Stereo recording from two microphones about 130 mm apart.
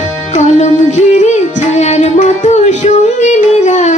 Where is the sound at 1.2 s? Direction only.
60° left (ahead or behind).